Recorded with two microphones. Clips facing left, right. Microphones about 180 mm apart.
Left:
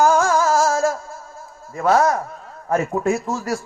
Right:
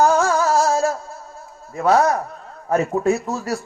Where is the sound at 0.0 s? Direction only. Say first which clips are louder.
Even; 65° right (ahead or behind).